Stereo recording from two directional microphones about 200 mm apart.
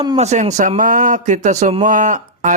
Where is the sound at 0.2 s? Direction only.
35° right (ahead or behind).